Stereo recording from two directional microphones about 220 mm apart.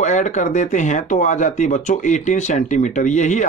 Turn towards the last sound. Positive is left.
turn(degrees=35)  # may be behind; listen again after turning